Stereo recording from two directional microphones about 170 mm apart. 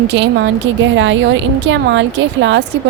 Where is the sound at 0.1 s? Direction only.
90° right.